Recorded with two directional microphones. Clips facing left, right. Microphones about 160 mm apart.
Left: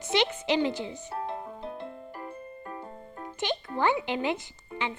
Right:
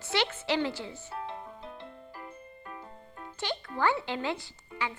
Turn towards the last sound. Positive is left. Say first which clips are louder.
# left 2 dB
turn(degrees=25)  # may be behind; listen again after turning